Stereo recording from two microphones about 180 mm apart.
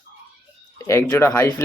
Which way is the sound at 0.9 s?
15° left (ahead or behind).